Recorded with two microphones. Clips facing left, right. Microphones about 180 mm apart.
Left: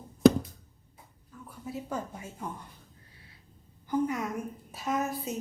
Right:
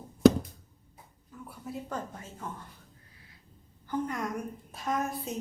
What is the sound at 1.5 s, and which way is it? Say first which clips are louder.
Speech: left 2 dB; centre (ahead or behind).